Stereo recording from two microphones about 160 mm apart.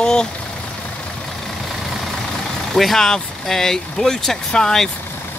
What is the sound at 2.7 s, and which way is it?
Speech, centre (ahead or behind).